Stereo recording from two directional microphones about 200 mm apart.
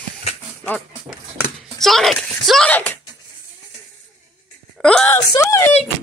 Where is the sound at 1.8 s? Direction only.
Centre (ahead or behind).